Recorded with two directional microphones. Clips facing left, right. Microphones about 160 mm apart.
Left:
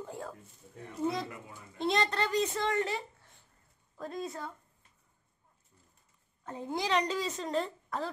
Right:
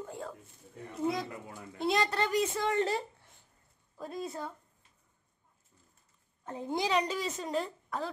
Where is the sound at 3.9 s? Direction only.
10° right (ahead or behind).